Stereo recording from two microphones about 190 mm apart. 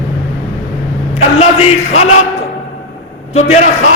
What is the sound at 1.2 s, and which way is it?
Speech, 35° left (ahead or behind).